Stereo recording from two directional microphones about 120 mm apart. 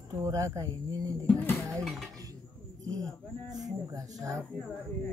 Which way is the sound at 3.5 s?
30° right (ahead or behind).